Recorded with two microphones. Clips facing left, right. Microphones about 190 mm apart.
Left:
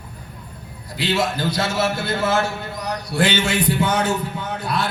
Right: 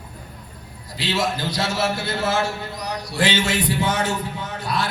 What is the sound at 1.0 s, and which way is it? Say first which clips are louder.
A man's voice: left 2 dB; 55° left (ahead or behind).